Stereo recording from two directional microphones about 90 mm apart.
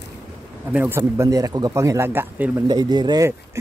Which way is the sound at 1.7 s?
35° right (ahead or behind).